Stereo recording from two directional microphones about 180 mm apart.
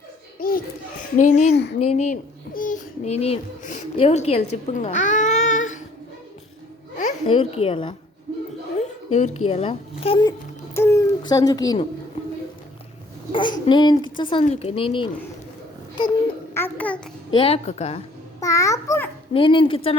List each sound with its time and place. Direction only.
0.3 s babbling: 55° left (ahead or behind)
1.1 s a woman's voice: 45° left (ahead or behind)
7.0 s speech: 30° left (ahead or behind)
10.8 s a child's voice: 15° left (ahead or behind)
13.3 s a woman's voice: 25° left (ahead or behind)
16.6 s babbling: 10° left (ahead or behind)
17.3 s a woman's voice: 30° left (ahead or behind)
18.3 s a child's voice: 20° left (ahead or behind)
19.3 s a woman's voice: 30° left (ahead or behind)